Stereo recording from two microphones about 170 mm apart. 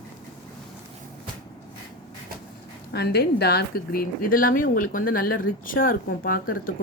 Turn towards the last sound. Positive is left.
turn(degrees=60)  # may be behind; listen again after turning